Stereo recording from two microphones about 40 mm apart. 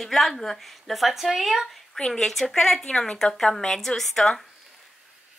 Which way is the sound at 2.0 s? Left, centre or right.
Centre.